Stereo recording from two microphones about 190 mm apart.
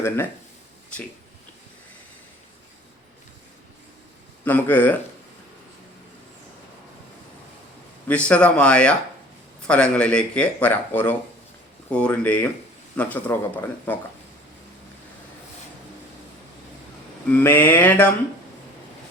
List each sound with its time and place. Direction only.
4.4 s speech: 10° left (ahead or behind)
8.0 s speech: 5° left (ahead or behind)
17.3 s speech: 10° left (ahead or behind)